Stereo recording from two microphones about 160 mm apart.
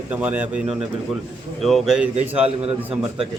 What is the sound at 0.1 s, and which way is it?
Speech, 10° right (ahead or behind).